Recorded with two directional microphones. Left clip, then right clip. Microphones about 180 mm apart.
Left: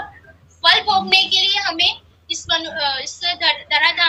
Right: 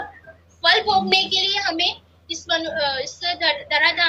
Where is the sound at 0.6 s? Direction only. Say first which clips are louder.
Left 2 dB; 5° right (ahead or behind).